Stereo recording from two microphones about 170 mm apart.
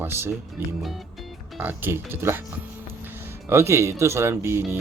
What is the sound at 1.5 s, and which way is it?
Speech, 10° right (ahead or behind).